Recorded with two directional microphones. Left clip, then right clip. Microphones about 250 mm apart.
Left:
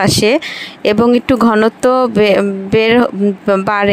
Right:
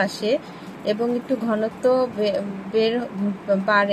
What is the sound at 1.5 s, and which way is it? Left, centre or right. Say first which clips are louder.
Speech: left 7 dB; left.